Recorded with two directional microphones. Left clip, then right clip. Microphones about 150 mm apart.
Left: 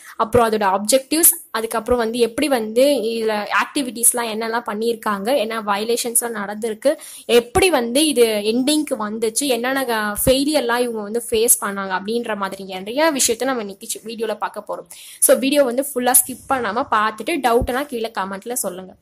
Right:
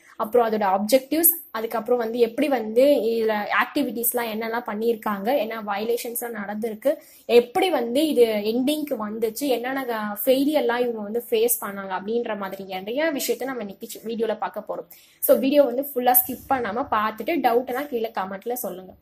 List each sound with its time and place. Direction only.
0.2 s a woman's voice: 20° left (ahead or behind)
14.0 s a woman's voice: 5° left (ahead or behind)
15.2 s a woman's voice: 25° left (ahead or behind)